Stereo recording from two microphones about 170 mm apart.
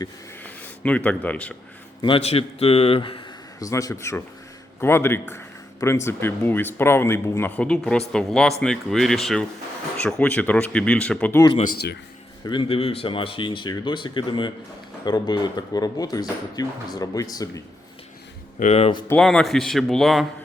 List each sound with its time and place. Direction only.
0.4 s speech: 10° left (ahead or behind)
2.0 s a man's voice: 30° left (ahead or behind)
3.6 s speech: 20° left (ahead or behind)
12.5 s speech: 30° left (ahead or behind)
18.6 s a man's voice: 40° left (ahead or behind)
19.0 s speech: 5° left (ahead or behind)